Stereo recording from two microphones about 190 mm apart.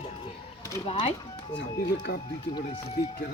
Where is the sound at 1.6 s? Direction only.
60° left (ahead or behind).